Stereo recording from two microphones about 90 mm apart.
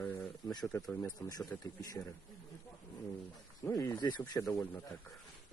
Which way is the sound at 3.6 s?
40° left (ahead or behind).